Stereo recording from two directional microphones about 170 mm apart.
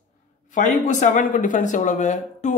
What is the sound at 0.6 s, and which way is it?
Speech, 45° left (ahead or behind).